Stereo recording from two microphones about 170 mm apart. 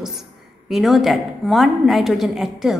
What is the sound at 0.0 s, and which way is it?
A woman's voice, centre (ahead or behind).